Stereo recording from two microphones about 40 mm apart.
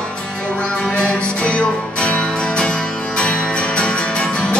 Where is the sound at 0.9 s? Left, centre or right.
Left.